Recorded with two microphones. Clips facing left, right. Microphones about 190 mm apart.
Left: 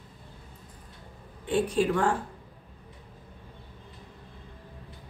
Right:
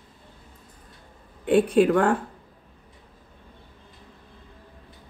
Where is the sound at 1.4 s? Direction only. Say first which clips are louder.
Right 7 dB; 60° right (ahead or behind).